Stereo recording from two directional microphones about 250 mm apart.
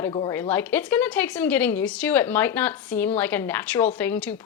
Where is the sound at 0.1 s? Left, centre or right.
Left.